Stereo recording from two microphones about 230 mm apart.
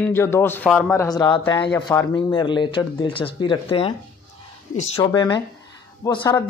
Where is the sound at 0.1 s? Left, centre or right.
Centre.